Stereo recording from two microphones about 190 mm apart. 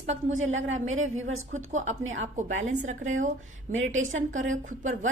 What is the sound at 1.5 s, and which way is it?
Speech, 40° right (ahead or behind).